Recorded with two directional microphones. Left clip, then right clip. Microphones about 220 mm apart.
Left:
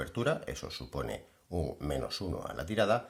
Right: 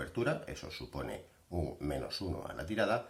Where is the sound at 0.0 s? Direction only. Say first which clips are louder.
Left 3 dB; 45° left (ahead or behind).